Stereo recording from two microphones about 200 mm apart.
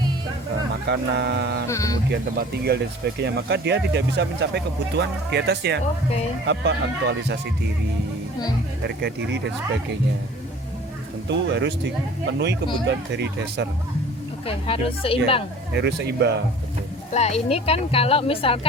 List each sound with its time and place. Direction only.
0.9 s speech: 60° right (ahead or behind)
1.6 s speech: 15° left (ahead or behind)
2.0 s speech: 55° right (ahead or behind)
9.0 s speech: 55° right (ahead or behind)
11.3 s speech: 60° right (ahead or behind)
12.9 s speech: 60° right (ahead or behind)
14.4 s speech: 30° left (ahead or behind)
15.7 s speech: 55° right (ahead or behind)
17.1 s speech: 30° left (ahead or behind)